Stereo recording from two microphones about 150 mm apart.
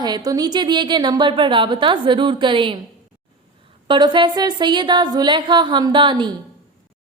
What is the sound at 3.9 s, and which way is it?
Speech, 30° right (ahead or behind).